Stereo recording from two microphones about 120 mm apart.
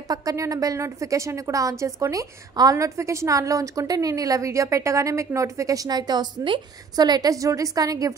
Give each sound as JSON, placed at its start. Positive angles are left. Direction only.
{"t": 0.1, "sound": "a woman's voice", "side_deg": -30}